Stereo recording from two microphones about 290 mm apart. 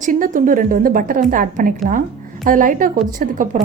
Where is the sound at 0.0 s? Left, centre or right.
Right.